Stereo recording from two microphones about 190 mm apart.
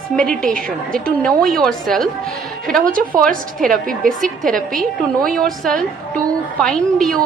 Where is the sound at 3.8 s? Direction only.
45° right (ahead or behind).